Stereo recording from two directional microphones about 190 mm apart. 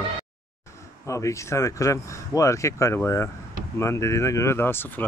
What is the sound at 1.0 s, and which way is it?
Speech, 15° left (ahead or behind).